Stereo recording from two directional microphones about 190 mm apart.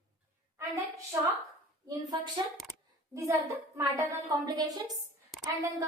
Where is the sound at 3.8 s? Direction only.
20° right (ahead or behind).